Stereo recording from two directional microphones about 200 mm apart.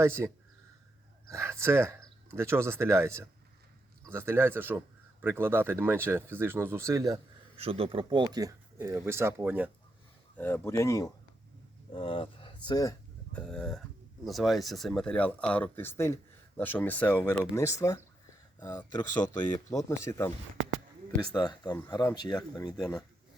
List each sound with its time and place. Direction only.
0.0 s speech: 15° right (ahead or behind)
1.3 s speech: 15° right (ahead or behind)
7.5 s speech: 30° right (ahead or behind); by 9.6 s 10° right (ahead or behind)
10.3 s speech: 10° left (ahead or behind)
13.3 s speech: 5° left (ahead or behind)
21.3 s speech: 20° left (ahead or behind)
22.8 s speech: centre (ahead or behind)